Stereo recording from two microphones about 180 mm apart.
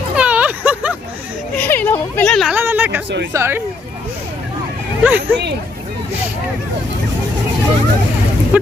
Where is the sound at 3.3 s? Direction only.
15° right (ahead or behind).